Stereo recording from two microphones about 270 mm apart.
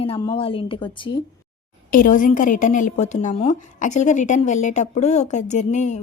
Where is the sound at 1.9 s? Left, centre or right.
Left.